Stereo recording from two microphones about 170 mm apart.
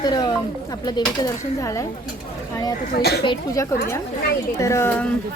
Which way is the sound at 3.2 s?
25° left (ahead or behind).